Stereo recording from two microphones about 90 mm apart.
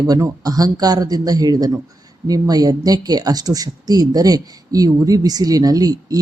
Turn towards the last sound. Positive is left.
turn(degrees=-45)  # may be behind; listen again after turning